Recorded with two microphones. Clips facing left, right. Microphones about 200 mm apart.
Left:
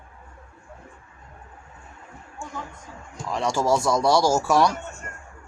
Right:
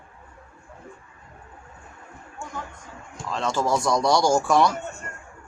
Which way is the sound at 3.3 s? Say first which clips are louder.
Left 2 dB; 10° left (ahead or behind).